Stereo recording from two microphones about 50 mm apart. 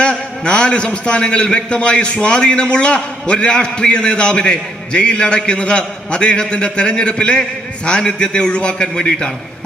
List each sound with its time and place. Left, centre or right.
0.0 s a man's voice: left